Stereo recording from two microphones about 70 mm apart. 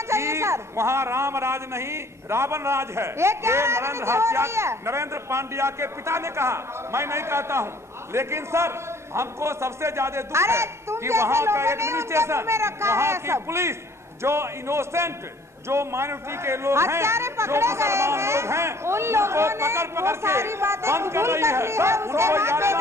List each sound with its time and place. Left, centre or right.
0.1 s a man's voice: right